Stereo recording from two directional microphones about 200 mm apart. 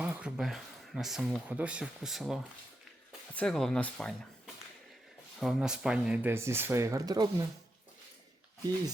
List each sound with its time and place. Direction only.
0.0 s speech: 5° right (ahead or behind)
5.4 s speech: centre (ahead or behind); by 7.4 s 20° right (ahead or behind)